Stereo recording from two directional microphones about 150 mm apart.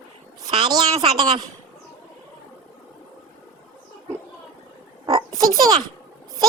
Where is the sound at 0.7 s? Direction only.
25° right (ahead or behind).